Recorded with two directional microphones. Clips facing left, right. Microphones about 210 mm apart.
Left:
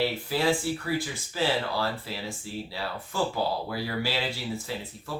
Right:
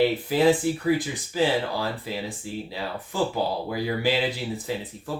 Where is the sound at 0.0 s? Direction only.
20° right (ahead or behind).